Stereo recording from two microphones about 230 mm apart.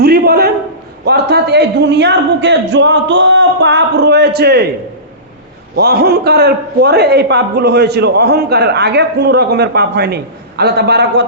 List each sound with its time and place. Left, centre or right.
0.0 s a sound: right
1.0 s a man's voice: right
5.7 s a man's voice: right